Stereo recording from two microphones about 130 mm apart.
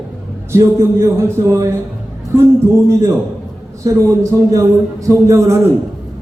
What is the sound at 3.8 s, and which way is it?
A man's voice, 25° right (ahead or behind).